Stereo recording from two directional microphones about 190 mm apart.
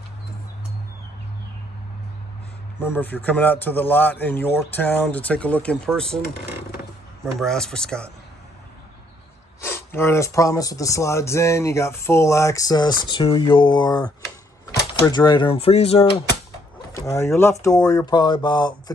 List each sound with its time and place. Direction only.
2.8 s speech: 10° left (ahead or behind)
7.3 s speech: centre (ahead or behind)
9.6 s speech: 10° left (ahead or behind); by 16.2 s 30° left (ahead or behind)
16.9 s speech: 15° left (ahead or behind)